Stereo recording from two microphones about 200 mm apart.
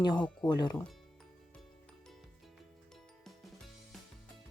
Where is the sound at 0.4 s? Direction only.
20° left (ahead or behind).